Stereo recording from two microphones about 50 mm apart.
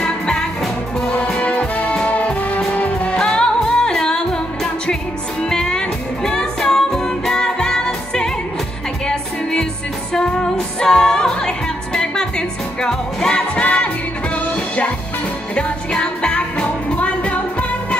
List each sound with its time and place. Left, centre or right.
0.0 s music: centre
1.1 s music: left
3.2 s music: centre
5.4 s music: centre